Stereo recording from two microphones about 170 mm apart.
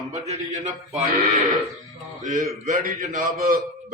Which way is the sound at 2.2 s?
45° right (ahead or behind).